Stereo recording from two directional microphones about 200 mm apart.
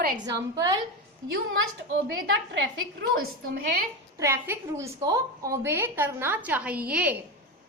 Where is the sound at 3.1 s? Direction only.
50° right (ahead or behind).